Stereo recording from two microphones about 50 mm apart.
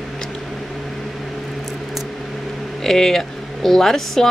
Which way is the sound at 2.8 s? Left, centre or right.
Centre.